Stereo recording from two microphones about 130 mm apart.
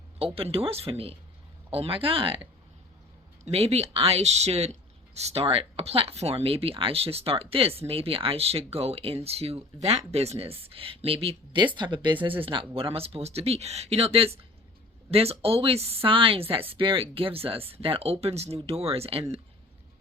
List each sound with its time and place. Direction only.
0.3 s speech: 45° right (ahead or behind)
3.4 s speech: 55° right (ahead or behind)